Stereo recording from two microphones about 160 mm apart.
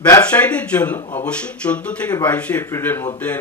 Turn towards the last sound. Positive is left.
turn(degrees=15)  # may be behind; listen again after turning